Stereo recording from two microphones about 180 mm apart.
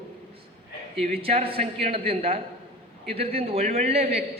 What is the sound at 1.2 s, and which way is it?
A man's voice, 30° right (ahead or behind).